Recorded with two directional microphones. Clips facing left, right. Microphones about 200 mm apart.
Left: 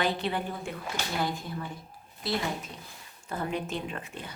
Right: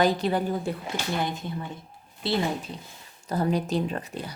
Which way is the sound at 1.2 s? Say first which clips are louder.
Right 2 dB; 20° right (ahead or behind).